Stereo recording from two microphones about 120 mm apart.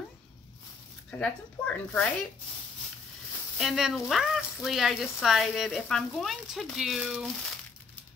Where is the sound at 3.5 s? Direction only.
Centre (ahead or behind).